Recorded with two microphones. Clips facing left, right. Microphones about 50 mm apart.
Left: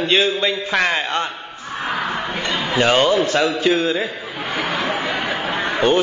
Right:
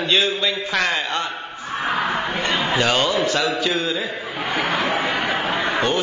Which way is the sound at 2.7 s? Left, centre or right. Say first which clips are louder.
Left 6 dB; left.